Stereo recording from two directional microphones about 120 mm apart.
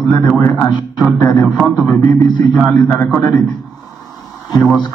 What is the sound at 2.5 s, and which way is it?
Speech, 15° left (ahead or behind).